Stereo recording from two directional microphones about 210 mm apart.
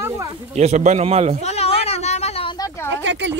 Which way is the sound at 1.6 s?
30° left (ahead or behind).